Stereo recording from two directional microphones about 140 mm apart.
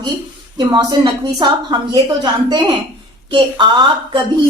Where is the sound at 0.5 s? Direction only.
30° right (ahead or behind).